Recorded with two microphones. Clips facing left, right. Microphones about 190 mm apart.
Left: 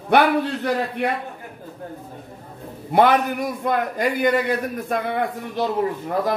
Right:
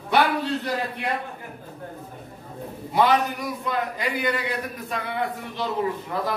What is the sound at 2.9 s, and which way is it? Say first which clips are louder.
A man's voice: left 4 dB; 55° left (ahead or behind).